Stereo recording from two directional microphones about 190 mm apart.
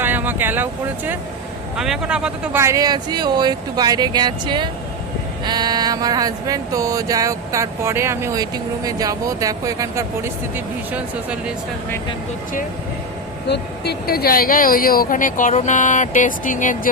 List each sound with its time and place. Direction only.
0.0 s speech: 10° right (ahead or behind)
5.5 s a sound: 20° right (ahead or behind); by 11.5 s 5° right (ahead or behind)
13.5 s speech: 55° left (ahead or behind)